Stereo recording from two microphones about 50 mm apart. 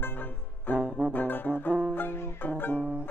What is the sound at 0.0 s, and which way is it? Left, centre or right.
Music, left.